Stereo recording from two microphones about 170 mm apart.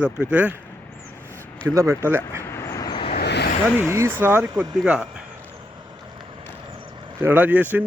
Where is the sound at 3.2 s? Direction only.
75° left (ahead or behind).